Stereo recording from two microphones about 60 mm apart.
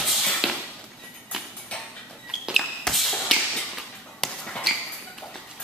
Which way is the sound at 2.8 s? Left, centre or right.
Centre.